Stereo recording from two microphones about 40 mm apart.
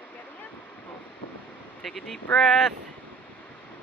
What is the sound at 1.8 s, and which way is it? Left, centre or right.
Speech, centre.